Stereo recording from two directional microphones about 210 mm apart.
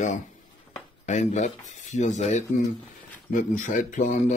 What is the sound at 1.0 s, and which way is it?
Speech, 35° left (ahead or behind).